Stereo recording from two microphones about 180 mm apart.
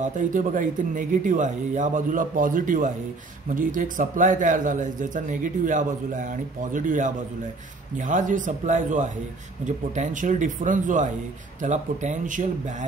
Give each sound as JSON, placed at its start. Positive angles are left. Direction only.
{"t": 0.0, "sound": "a man's voice", "side_deg": -45}